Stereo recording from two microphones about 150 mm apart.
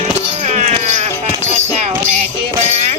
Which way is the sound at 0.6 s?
50° right (ahead or behind).